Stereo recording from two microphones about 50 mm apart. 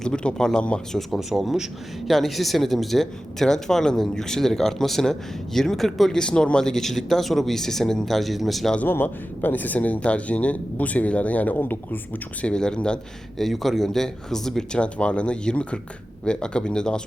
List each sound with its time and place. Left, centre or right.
0.0 s speech: centre
1.3 s a man's voice: centre
6.1 s speech: centre
8.9 s speech: left
11.6 s speech: left
12.5 s speech: centre
13.4 s speech: centre
14.8 s speech: left